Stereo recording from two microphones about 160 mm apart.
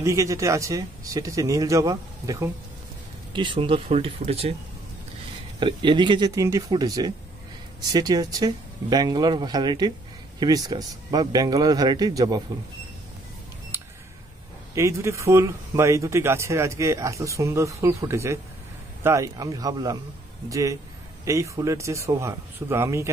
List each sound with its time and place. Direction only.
0.0 s speech: 20° right (ahead or behind)
3.3 s speech: 30° right (ahead or behind)
5.6 s speech: 30° right (ahead or behind)
14.8 s speech: 20° right (ahead or behind)